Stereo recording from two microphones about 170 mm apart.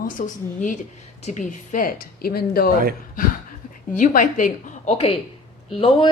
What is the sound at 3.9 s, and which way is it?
A woman's voice, 50° left (ahead or behind).